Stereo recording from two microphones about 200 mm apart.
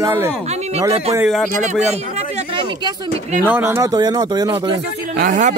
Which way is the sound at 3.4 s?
10° right (ahead or behind).